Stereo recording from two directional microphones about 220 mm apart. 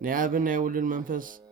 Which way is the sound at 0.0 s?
40° right (ahead or behind).